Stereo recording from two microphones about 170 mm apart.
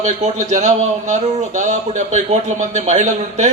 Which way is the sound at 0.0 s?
45° right (ahead or behind).